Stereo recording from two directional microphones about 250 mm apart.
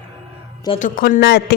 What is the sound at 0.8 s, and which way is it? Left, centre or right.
Speech, left.